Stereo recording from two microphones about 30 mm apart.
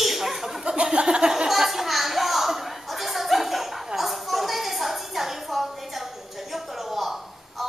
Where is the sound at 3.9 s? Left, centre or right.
Centre.